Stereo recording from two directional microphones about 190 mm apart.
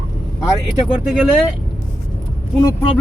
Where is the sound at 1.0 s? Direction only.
Centre (ahead or behind).